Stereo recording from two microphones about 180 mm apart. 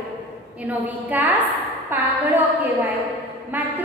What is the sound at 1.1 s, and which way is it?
Speech, 10° right (ahead or behind).